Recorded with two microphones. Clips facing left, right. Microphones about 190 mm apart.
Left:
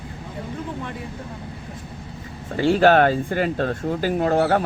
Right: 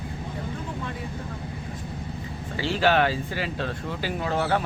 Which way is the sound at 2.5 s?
50° left (ahead or behind).